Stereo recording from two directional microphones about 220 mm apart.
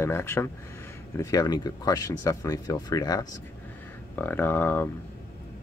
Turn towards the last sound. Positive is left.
turn(degrees=10)  # may be behind; listen again after turning